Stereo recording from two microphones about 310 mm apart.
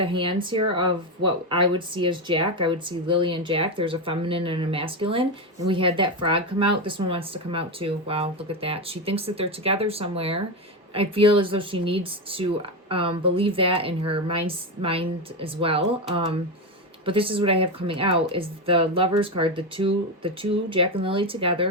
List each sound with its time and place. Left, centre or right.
0.0 s speech: centre